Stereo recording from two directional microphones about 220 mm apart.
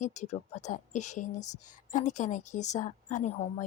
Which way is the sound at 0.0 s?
35° left (ahead or behind).